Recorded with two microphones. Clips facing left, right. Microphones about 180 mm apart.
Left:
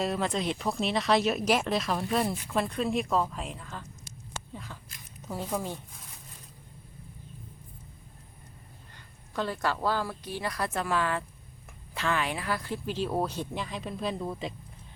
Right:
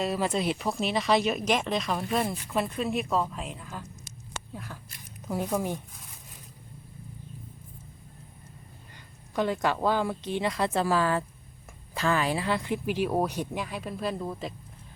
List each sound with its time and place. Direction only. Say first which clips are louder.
0.0 s speech: right 2 dB; 5° right (ahead or behind)
4.5 s a sound: right 3 dB; 10° right (ahead or behind)
5.3 s speech: right 4 dB; 10° right (ahead or behind)
9.3 s speech: right 4 dB; 15° right (ahead or behind); by 14.5 s centre (ahead or behind)